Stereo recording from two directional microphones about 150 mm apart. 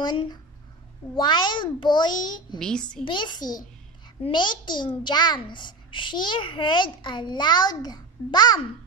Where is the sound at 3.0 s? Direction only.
30° left (ahead or behind).